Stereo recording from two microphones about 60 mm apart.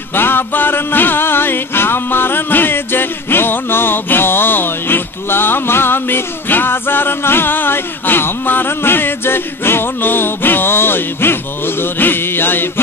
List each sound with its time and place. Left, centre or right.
0.1 s music: left